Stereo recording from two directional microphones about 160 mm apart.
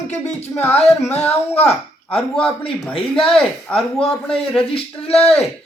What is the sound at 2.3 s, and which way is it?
Speech, centre (ahead or behind).